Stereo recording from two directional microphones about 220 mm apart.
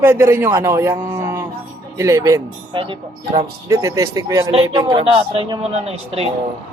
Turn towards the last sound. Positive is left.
turn(degrees=-25)  # may be behind; listen again after turning